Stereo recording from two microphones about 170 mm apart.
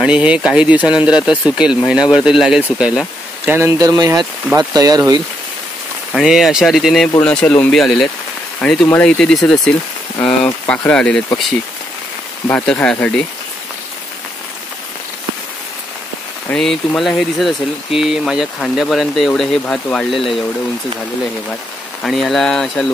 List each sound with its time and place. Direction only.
0.0 s speech: 5° right (ahead or behind)
3.5 s speech: 15° right (ahead or behind)
6.1 s speech: centre (ahead or behind)
12.4 s speech: 10° left (ahead or behind)
16.4 s speech: 5° left (ahead or behind)
22.0 s speech: centre (ahead or behind)